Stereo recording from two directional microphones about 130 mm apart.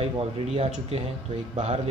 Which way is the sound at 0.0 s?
50° right (ahead or behind).